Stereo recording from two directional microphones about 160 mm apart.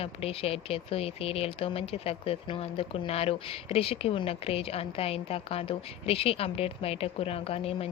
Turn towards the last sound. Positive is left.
turn(degrees=35)  # may be behind; listen again after turning